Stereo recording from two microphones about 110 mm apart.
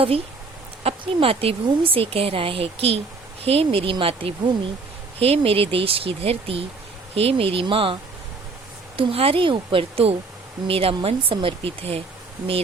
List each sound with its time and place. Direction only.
0.9 s speech: 55° right (ahead or behind)
9.0 s speech: 55° right (ahead or behind)